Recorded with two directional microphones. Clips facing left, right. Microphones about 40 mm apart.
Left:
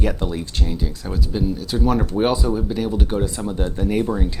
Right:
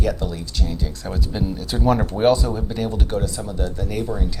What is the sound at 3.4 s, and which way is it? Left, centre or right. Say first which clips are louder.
Speech: left 3 dB; left.